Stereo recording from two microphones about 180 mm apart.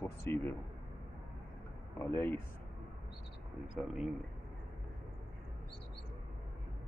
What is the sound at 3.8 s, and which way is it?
Speech, centre (ahead or behind).